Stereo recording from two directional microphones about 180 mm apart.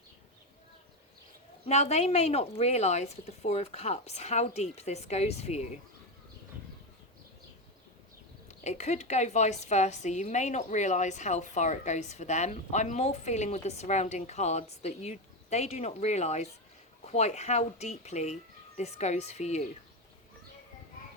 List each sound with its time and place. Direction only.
1.6 s a woman's voice: 40° left (ahead or behind)
8.4 s a woman's voice: 40° left (ahead or behind)